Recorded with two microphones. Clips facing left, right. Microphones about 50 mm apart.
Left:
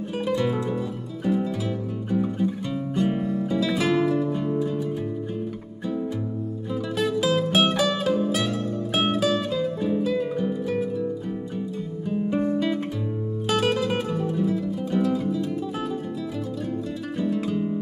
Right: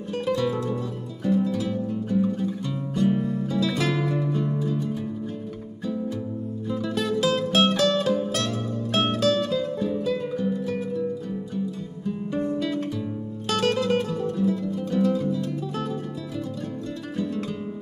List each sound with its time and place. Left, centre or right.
0.1 s music: centre
3.5 s music: centre
4.4 s music: centre
6.7 s music: centre
9.8 s music: centre
12.5 s guitar: left
13.5 s music: centre
17.3 s music: centre